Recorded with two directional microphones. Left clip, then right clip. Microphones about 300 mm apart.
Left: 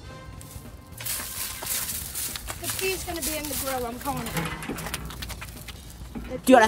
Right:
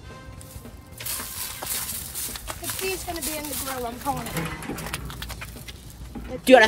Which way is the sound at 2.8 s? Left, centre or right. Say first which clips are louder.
Left 1 dB; left.